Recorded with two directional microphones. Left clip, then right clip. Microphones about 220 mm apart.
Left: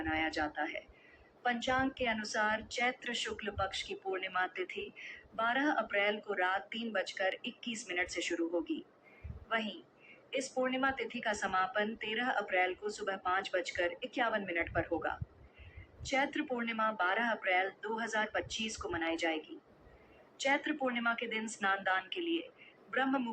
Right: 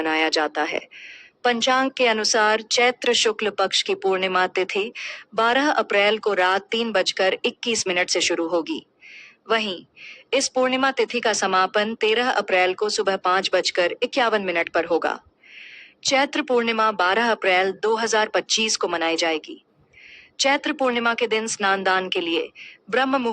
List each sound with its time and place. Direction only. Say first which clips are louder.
0.0 s a woman's voice: right 14 dB; 55° right (ahead or behind)
20.4 s a woman's voice: right 13 dB; 55° right (ahead or behind)